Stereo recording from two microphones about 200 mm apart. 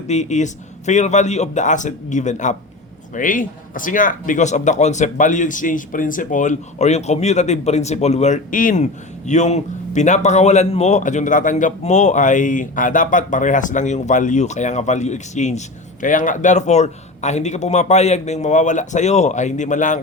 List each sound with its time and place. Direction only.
0.1 s speech: 35° left (ahead or behind)